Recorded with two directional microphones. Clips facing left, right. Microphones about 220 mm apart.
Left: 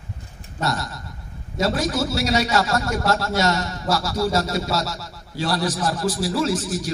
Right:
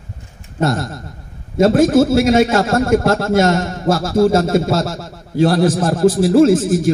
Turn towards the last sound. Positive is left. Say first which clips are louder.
# right 12 dB
turn(degrees=-50)  # may be behind; listen again after turning